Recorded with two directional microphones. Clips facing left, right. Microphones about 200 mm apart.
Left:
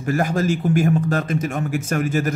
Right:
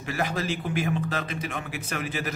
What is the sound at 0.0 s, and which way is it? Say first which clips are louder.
A man's voice: left 8 dB; 45° left (ahead or behind).